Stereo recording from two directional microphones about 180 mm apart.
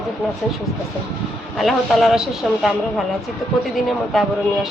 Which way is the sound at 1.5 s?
Centre (ahead or behind).